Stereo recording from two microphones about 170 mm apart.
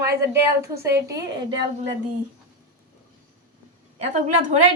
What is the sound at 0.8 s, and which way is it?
Speech, 70° right (ahead or behind).